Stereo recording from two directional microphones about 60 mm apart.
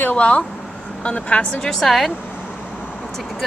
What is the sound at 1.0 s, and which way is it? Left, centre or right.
Speech, centre.